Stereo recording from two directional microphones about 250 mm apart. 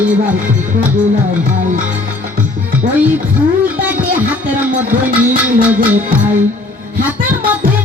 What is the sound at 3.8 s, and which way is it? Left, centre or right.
Music, centre.